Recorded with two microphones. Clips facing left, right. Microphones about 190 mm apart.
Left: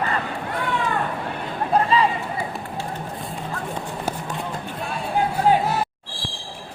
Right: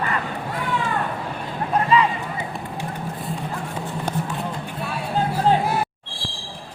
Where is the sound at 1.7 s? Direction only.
30° left (ahead or behind).